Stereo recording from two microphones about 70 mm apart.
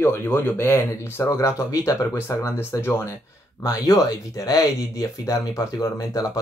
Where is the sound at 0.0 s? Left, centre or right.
Left.